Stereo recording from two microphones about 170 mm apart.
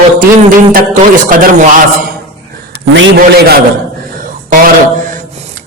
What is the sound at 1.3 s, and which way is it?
Speech, 55° right (ahead or behind).